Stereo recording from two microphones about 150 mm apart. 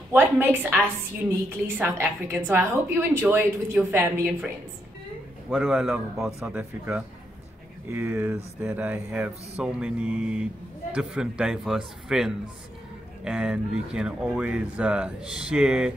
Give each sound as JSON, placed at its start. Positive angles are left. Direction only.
{"t": 0.1, "sound": "a woman's voice", "side_deg": -15}
{"t": 1.8, "sound": "speech", "side_deg": -15}
{"t": 5.5, "sound": "speech", "side_deg": 0}